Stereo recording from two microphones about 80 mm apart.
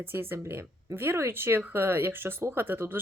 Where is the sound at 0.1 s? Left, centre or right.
Right.